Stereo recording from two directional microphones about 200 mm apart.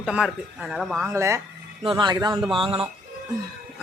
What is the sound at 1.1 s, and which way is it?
A man's voice, 15° right (ahead or behind).